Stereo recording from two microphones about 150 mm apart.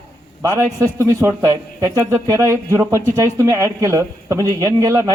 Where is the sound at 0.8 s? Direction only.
20° right (ahead or behind).